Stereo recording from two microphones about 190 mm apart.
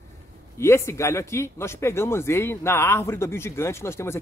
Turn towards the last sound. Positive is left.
turn(degrees=15)  # may be behind; listen again after turning